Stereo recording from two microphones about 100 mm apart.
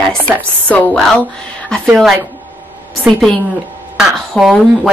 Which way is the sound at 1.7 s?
5° left (ahead or behind).